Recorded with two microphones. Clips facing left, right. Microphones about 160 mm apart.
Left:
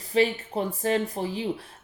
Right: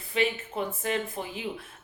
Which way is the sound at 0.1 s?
35° left (ahead or behind).